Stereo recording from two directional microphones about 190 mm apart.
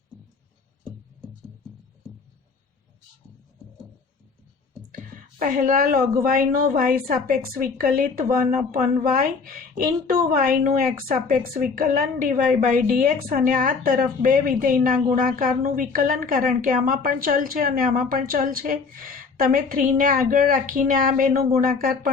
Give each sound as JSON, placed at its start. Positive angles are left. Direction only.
{"t": 5.4, "sound": "a woman's voice", "side_deg": -45}